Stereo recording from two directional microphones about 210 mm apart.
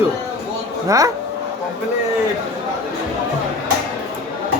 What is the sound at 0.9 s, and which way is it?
Speech, 15° right (ahead or behind).